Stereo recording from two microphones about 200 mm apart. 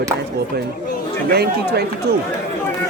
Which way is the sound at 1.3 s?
55° right (ahead or behind).